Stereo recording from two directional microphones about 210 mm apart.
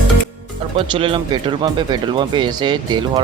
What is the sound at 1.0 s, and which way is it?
Speech, 25° right (ahead or behind).